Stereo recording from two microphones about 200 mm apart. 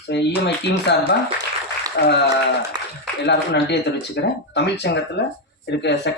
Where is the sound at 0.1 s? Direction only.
60° left (ahead or behind).